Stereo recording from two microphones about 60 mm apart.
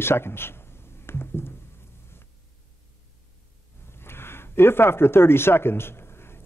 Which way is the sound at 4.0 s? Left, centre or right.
Left.